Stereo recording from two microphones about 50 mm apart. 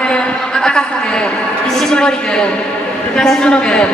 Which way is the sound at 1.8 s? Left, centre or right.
Centre.